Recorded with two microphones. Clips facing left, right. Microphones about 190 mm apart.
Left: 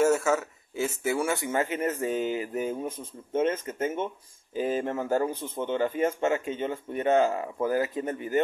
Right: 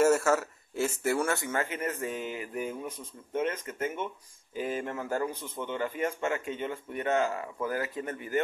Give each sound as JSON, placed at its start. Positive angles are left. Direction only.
{"t": 0.0, "sound": "a man's voice", "side_deg": 0}
{"t": 1.3, "sound": "a man's voice", "side_deg": 20}